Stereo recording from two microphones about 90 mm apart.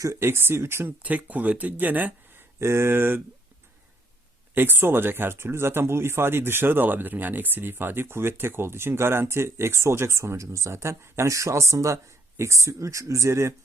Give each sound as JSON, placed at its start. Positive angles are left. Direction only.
{"t": 0.0, "sound": "speech", "side_deg": -30}
{"t": 2.6, "sound": "speech", "side_deg": -30}
{"t": 4.5, "sound": "speech", "side_deg": -25}